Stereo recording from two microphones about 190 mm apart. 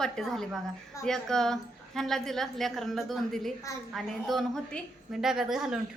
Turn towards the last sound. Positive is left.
turn(degrees=0)  # may be behind; listen again after turning